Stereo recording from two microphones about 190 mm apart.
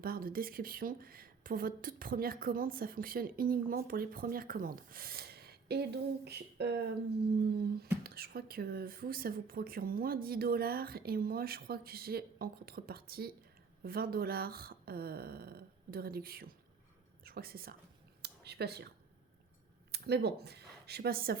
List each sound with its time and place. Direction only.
0.0 s a woman's voice: 50° right (ahead or behind)
18.2 s a sound: 60° right (ahead or behind)
19.9 s speech: 60° right (ahead or behind)